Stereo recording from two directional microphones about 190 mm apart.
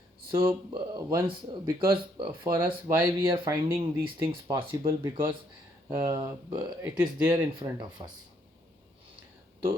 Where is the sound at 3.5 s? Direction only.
15° right (ahead or behind).